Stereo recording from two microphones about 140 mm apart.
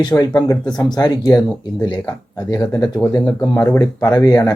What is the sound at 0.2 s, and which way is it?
Speech, 25° left (ahead or behind).